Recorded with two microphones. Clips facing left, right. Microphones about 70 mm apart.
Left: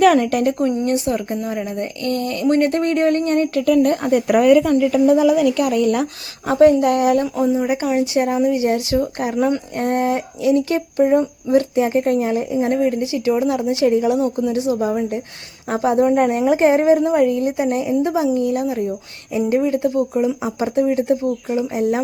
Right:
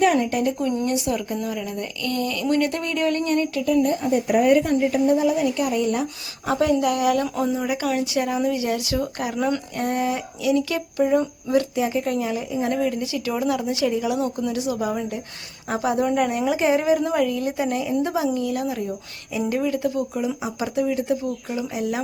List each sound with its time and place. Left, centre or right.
0.0 s speech: left
0.9 s speech: left
3.8 s speech: left
5.0 s speech: left
6.5 s speech: left
7.3 s speech: centre
7.6 s a woman's voice: left